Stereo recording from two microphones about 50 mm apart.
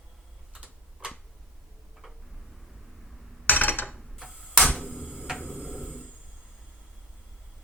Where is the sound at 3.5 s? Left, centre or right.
Left.